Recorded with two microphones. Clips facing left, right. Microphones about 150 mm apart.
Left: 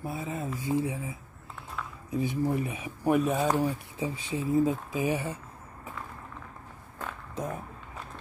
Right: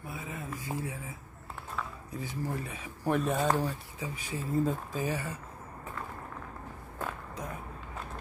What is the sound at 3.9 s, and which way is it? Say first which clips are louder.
Speech: left 6 dB; 25° left (ahead or behind).